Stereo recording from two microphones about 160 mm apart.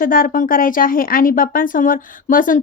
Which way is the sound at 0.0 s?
60° left (ahead or behind).